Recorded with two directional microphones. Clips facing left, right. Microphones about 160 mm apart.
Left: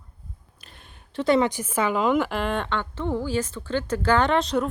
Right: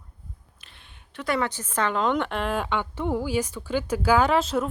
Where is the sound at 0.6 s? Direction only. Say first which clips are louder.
Left 4 dB; 40° left (ahead or behind).